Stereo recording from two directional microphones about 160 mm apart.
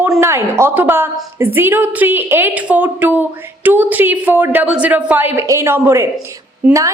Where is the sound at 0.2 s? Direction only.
15° right (ahead or behind).